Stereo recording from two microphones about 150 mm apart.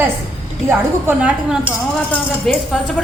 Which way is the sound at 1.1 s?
10° right (ahead or behind).